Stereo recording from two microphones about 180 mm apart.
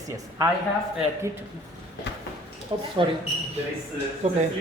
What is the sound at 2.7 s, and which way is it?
Speech, 30° right (ahead or behind).